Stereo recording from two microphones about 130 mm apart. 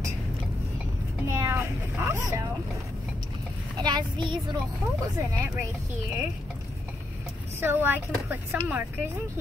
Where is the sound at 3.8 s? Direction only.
35° right (ahead or behind).